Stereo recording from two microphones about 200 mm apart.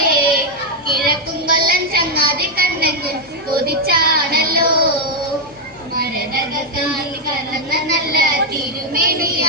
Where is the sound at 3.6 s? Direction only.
50° right (ahead or behind).